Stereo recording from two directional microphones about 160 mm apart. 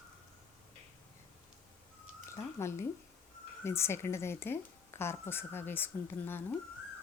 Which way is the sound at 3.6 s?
15° left (ahead or behind).